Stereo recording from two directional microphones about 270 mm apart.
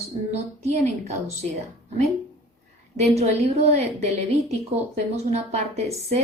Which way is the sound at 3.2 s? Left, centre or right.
Right.